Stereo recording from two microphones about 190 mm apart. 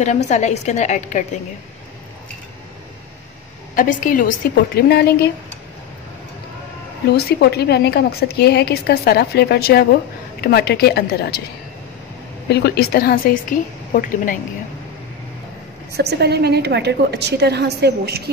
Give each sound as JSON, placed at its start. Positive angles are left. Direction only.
{"t": 0.3, "sound": "a woman's voice", "side_deg": 35}
{"t": 3.7, "sound": "a woman's voice", "side_deg": 45}
{"t": 7.1, "sound": "a woman's voice", "side_deg": 60}
{"t": 12.4, "sound": "a woman's voice", "side_deg": 60}
{"t": 15.9, "sound": "a woman's voice", "side_deg": -60}